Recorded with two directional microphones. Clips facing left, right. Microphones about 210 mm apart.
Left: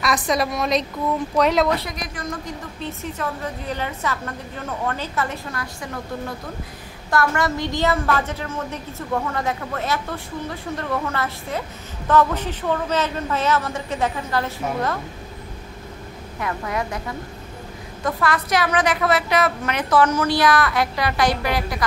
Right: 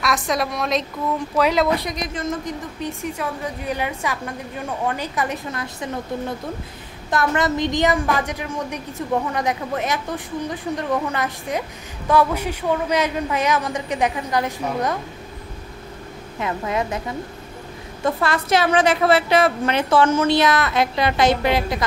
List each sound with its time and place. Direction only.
0.0 s a woman's voice: centre (ahead or behind)
1.8 s a woman's voice: 20° right (ahead or behind)
16.3 s a woman's voice: 20° right (ahead or behind)
18.0 s a woman's voice: 25° right (ahead or behind)